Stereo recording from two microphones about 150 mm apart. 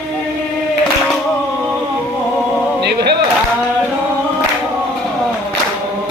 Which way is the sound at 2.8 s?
90° right.